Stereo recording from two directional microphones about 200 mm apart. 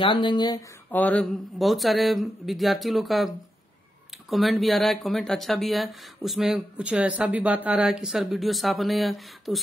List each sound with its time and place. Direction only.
0.0 s speech: 25° left (ahead or behind)
0.9 s speech: 5° left (ahead or behind)
4.3 s speech: centre (ahead or behind)